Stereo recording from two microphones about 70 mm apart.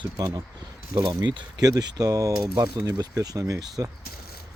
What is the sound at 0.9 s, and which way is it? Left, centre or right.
Speech, right.